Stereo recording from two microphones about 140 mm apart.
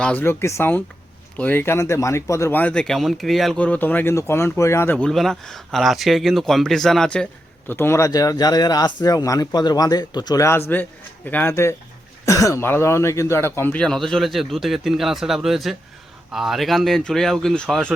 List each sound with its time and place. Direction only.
0.0 s speech: 10° left (ahead or behind)
3.6 s speech: 10° left (ahead or behind)
7.7 s speech: 15° left (ahead or behind)